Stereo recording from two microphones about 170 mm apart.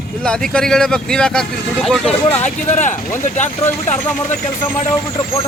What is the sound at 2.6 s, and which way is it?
Speech, 45° left (ahead or behind).